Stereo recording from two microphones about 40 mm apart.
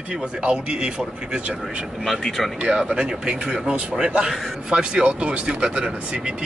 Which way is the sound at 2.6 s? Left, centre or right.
Right.